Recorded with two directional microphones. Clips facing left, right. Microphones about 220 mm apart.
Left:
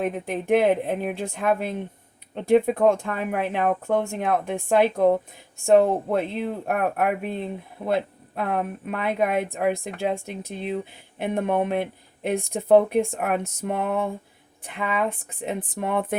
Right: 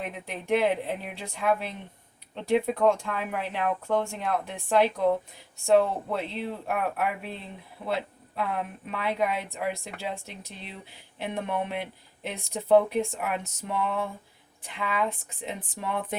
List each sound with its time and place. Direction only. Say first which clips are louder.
0.0 s speech: left 9 dB; 50° left (ahead or behind)